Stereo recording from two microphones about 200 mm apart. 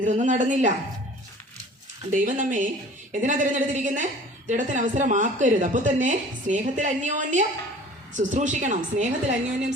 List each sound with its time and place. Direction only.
0.0 s a woman's voice: 40° right (ahead or behind)
2.1 s a woman's voice: 40° right (ahead or behind)